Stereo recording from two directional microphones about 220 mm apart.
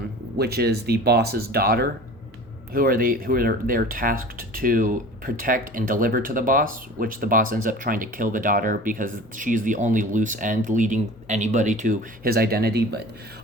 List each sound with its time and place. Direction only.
0.3 s speech: 45° right (ahead or behind)